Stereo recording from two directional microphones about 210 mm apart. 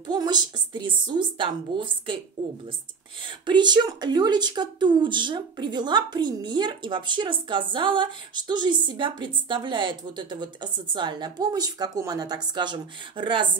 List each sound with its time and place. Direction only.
0.0 s a woman's voice: 20° right (ahead or behind)
3.3 s a woman's voice: 20° right (ahead or behind)